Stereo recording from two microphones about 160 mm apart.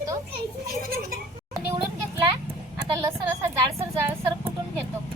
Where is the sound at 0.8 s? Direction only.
65° right (ahead or behind).